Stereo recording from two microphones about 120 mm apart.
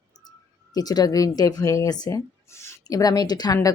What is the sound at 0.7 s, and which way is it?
Speech, 35° left (ahead or behind).